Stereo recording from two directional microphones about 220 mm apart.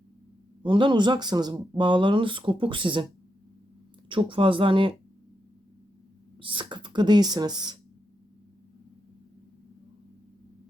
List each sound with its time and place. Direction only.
0.6 s speech: 20° right (ahead or behind)
4.1 s speech: 20° right (ahead or behind)
6.4 s speech: 20° right (ahead or behind)